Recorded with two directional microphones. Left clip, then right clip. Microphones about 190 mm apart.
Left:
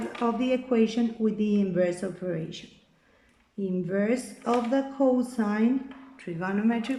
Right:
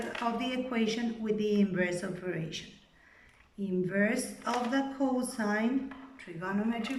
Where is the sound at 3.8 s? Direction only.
35° left (ahead or behind).